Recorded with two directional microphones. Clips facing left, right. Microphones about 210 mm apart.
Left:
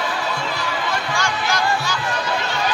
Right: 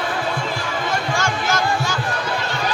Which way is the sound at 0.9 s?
45° right (ahead or behind).